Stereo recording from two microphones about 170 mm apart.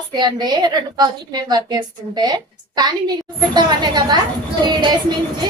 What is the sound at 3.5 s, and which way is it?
Speech, 25° right (ahead or behind).